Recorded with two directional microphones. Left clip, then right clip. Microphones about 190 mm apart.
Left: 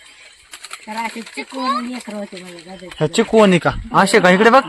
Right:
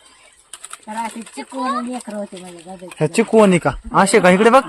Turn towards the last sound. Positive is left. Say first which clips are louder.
# left 1 dB
turn(degrees=-5)  # may be behind; listen again after turning